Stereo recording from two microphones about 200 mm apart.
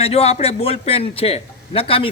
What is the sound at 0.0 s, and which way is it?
Speech, 30° left (ahead or behind).